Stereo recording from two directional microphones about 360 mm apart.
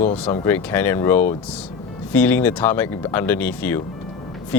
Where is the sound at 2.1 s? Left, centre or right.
Centre.